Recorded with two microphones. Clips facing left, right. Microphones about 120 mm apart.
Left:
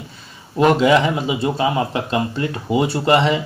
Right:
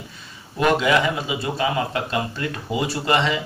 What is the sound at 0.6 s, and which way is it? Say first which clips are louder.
Speech: left 5 dB; 30° left (ahead or behind).